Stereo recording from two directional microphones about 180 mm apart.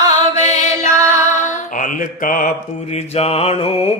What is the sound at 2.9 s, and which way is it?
Mantra, 35° left (ahead or behind).